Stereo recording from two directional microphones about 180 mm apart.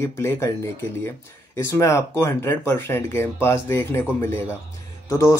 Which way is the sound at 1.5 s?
15° left (ahead or behind).